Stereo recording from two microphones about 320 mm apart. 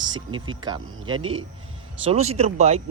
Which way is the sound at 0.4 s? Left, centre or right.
Centre.